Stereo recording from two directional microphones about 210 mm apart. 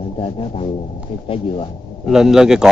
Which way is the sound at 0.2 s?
25° left (ahead or behind).